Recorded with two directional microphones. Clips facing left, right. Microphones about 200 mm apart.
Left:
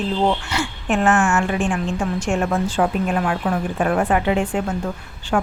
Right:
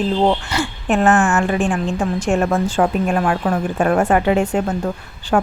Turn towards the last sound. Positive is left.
turn(degrees=-45)  # may be behind; listen again after turning